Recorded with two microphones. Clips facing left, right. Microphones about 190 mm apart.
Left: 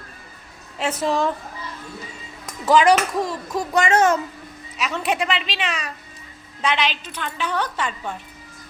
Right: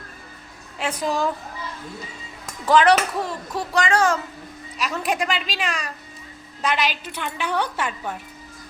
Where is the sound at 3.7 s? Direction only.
25° left (ahead or behind).